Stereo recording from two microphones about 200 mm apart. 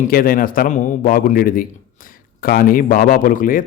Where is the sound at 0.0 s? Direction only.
45° left (ahead or behind).